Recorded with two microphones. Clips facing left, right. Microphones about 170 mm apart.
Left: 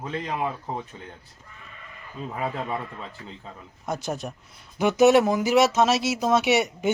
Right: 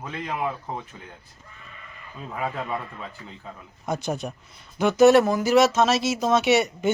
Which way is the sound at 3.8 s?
Centre (ahead or behind).